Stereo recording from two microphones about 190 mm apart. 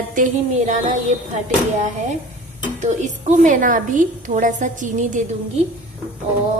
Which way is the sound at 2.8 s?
40° right (ahead or behind).